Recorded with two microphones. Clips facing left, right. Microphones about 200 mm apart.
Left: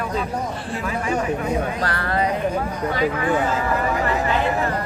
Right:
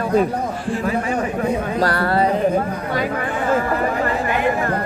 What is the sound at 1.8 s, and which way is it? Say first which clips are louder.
Music: right 5 dB; 35° right (ahead or behind).